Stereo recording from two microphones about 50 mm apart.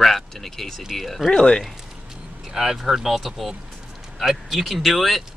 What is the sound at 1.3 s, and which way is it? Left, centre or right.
Speech, centre.